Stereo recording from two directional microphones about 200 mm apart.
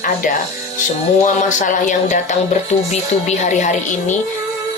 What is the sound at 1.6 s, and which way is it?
Speech, 40° left (ahead or behind).